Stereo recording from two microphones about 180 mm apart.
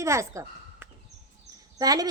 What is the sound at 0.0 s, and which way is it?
A woman's voice, 15° right (ahead or behind).